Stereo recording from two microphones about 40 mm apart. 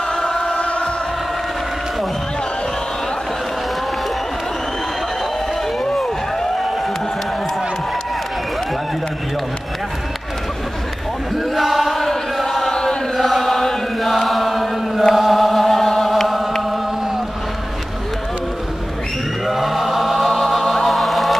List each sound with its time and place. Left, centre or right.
0.1 s music: centre
11.3 s chant: centre
19.4 s chant: centre